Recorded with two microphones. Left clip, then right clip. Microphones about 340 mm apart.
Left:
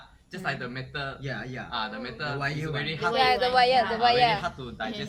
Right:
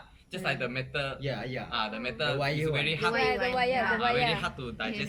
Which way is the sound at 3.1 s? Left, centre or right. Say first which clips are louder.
Left 6 dB; left.